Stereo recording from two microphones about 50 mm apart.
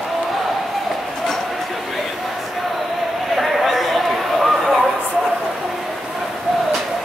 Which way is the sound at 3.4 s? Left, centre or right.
Centre.